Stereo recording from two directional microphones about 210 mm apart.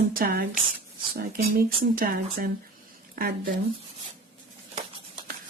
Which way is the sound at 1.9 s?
45° right (ahead or behind).